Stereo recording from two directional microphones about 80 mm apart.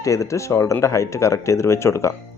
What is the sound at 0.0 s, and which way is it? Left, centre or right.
Speech, left.